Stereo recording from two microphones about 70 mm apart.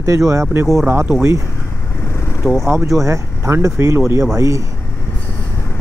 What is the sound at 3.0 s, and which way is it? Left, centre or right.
Speech, right.